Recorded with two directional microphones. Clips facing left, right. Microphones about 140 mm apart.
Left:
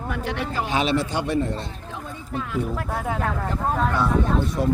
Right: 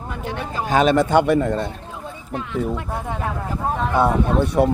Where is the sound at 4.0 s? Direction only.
65° right (ahead or behind).